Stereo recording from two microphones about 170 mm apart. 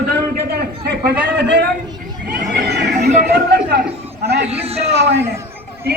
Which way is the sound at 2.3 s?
75° right (ahead or behind).